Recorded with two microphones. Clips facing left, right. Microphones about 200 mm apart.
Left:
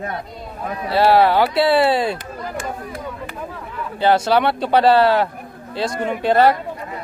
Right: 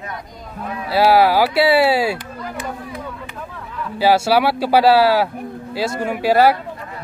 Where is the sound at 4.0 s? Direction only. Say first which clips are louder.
Right 1 dB; 10° right (ahead or behind).